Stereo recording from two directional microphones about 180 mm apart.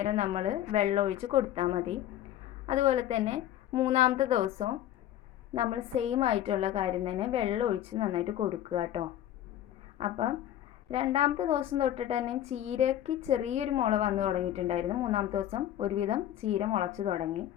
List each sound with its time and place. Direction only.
0.0 s a woman's voice: 40° right (ahead or behind)
3.7 s a woman's voice: 20° right (ahead or behind)
3.9 s a woman's voice: 40° right (ahead or behind)